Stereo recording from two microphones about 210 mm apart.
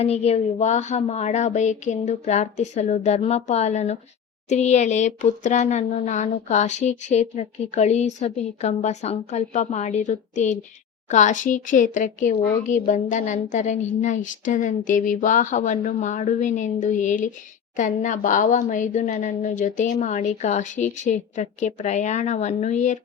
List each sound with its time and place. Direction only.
0.0 s speech: 30° left (ahead or behind)